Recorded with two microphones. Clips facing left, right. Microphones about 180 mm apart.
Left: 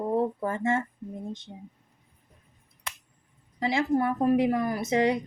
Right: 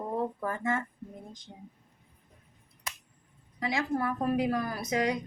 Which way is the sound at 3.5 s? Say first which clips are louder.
Left 5 dB; 30° left (ahead or behind).